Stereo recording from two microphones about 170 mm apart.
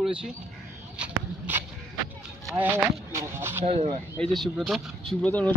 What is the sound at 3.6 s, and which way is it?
Speech, 40° right (ahead or behind).